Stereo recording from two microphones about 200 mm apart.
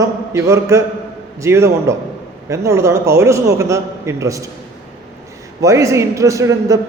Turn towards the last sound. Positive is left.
turn(degrees=-15)  # may be behind; listen again after turning